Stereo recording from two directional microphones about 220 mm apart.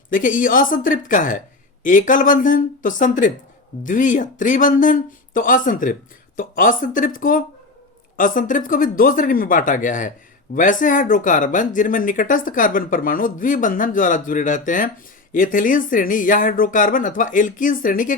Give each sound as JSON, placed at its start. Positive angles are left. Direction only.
{"t": 0.1, "sound": "speech", "side_deg": 35}